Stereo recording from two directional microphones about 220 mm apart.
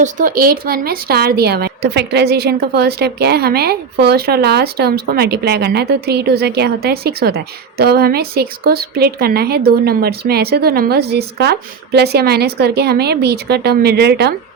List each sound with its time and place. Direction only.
0.0 s a woman's voice: 40° right (ahead or behind)